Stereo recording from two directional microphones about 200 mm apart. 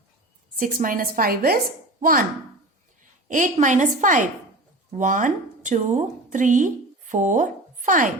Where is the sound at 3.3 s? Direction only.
40° right (ahead or behind).